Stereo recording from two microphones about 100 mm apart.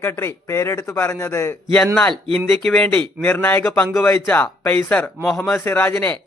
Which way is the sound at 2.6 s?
5° left (ahead or behind).